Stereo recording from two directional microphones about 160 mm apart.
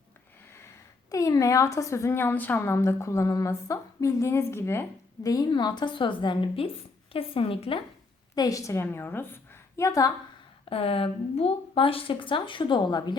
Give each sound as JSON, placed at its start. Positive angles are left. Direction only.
{"t": 1.1, "sound": "a woman's voice", "side_deg": 20}
{"t": 8.4, "sound": "a woman's voice", "side_deg": 20}
{"t": 10.7, "sound": "speech", "side_deg": 35}